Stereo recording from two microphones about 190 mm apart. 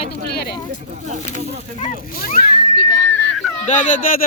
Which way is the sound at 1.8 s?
50° left (ahead or behind).